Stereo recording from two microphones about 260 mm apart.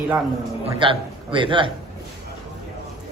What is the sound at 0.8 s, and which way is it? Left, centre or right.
Speech, centre.